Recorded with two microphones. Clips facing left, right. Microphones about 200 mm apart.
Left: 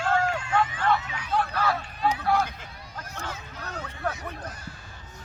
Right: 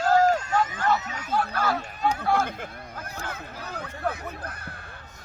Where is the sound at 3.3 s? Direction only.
55° right (ahead or behind).